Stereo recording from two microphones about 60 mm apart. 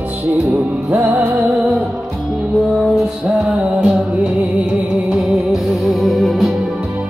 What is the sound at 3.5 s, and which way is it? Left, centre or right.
Music, right.